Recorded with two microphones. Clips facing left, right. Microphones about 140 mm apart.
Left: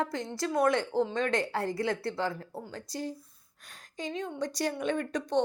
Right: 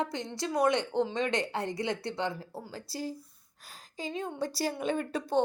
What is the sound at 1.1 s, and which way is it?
Speech, 20° right (ahead or behind).